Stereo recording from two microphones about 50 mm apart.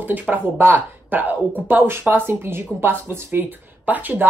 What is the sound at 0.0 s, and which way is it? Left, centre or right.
Speech, right.